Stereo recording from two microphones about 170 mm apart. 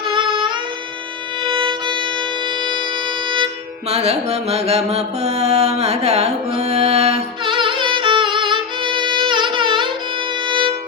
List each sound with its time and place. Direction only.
0.1 s music: 30° right (ahead or behind)
10.4 s violin: 30° right (ahead or behind)